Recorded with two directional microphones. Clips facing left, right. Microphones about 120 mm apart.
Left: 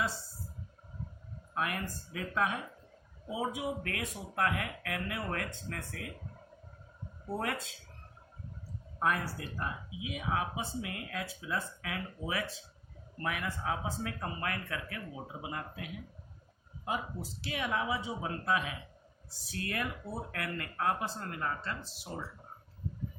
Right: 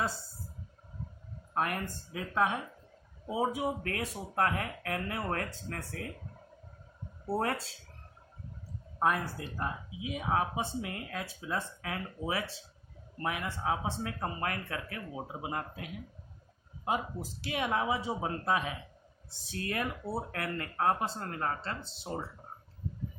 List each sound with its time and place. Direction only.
1.5 s speech: 35° right (ahead or behind)
7.3 s speech: 35° right (ahead or behind)
9.0 s speech: 25° right (ahead or behind)
17.5 s speech: 30° right (ahead or behind)